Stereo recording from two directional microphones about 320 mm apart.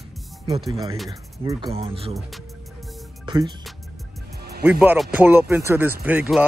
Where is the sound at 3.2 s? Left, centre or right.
Centre.